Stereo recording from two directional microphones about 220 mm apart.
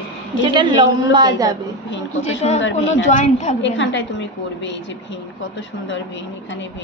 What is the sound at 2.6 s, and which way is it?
Speech, 55° left (ahead or behind).